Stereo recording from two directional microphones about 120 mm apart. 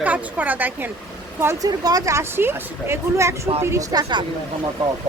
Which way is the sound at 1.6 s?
30° right (ahead or behind).